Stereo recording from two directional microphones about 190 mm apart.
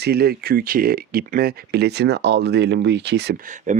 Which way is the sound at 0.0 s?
55° right (ahead or behind).